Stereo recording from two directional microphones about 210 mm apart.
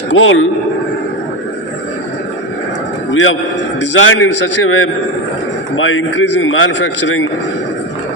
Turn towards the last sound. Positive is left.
turn(degrees=65)  # may be behind; listen again after turning